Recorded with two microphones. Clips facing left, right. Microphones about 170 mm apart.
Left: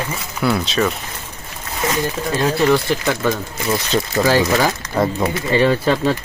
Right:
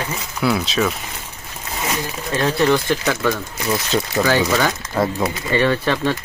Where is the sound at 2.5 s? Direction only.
5° left (ahead or behind).